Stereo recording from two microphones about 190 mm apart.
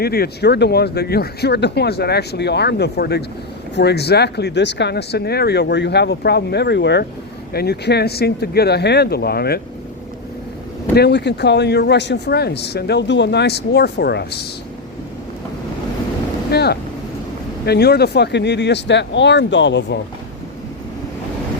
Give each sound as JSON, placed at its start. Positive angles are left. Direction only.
{"t": 0.0, "sound": "speech", "side_deg": 55}
{"t": 10.9, "sound": "speech", "side_deg": 60}
{"t": 16.5, "sound": "speech", "side_deg": 60}